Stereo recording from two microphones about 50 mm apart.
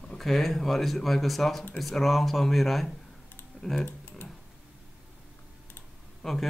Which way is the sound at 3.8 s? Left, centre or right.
Left.